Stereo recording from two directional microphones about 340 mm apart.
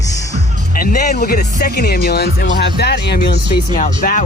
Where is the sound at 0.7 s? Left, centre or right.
Left.